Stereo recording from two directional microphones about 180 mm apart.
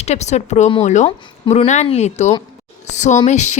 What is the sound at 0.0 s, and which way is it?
A woman's voice, 40° left (ahead or behind).